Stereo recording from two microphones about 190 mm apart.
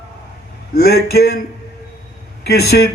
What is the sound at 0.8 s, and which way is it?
Speech, 55° left (ahead or behind).